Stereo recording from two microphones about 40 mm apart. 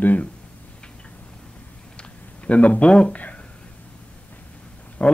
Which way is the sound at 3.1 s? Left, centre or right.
Left.